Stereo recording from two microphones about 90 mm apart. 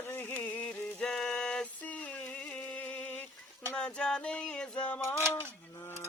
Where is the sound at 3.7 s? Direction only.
10° left (ahead or behind).